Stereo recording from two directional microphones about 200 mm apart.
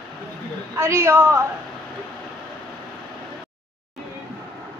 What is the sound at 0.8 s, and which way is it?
Female singing, 15° right (ahead or behind).